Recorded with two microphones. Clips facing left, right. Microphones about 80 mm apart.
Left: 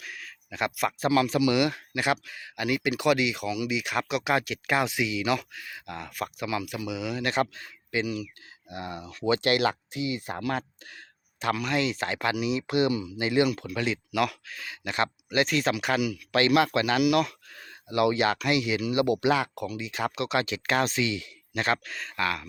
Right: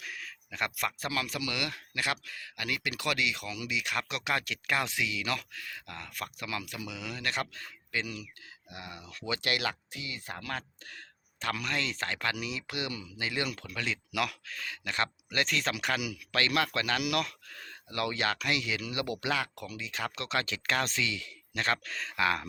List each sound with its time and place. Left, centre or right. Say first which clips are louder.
0.0 s a sound: left 1 dB; centre
0.9 s speech: left 10 dB; left
7.3 s speech: left 6 dB; centre
8.7 s speech: left 9 dB; left; by 14.0 s centre
14.1 s speech: left 6 dB; centre
16.0 s speech: left 9 dB; centre
16.3 s speech: left 7 dB; centre